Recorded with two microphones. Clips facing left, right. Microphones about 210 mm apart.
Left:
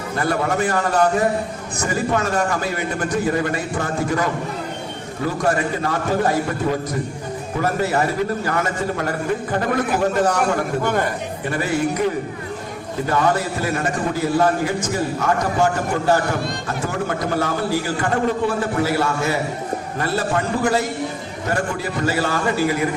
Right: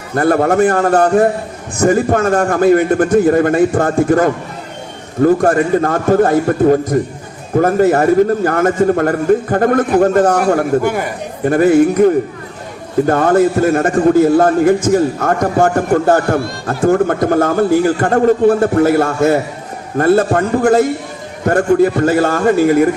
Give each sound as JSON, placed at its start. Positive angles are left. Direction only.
{"t": 0.2, "sound": "a man's voice", "side_deg": -50}